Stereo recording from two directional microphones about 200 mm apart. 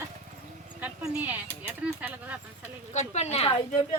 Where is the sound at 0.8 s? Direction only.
10° right (ahead or behind).